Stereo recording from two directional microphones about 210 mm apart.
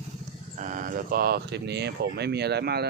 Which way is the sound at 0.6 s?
40° right (ahead or behind).